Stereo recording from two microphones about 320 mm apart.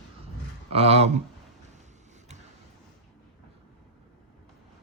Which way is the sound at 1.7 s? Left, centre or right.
Right.